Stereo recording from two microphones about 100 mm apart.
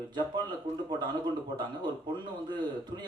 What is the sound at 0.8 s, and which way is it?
A man's voice, 45° right (ahead or behind).